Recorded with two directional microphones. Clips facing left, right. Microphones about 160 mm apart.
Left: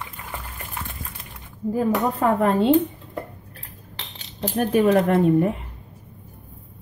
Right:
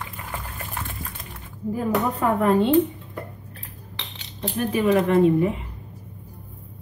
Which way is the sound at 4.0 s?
40° left (ahead or behind).